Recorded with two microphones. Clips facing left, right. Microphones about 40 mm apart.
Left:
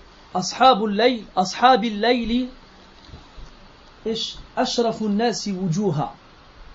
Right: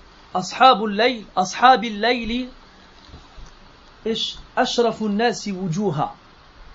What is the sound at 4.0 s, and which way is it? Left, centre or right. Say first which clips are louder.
Speech: right 2 dB; right.